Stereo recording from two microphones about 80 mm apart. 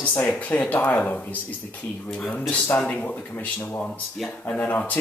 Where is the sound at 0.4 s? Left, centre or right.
Centre.